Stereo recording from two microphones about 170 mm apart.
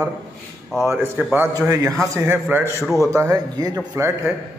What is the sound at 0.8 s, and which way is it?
A man's voice, 15° right (ahead or behind).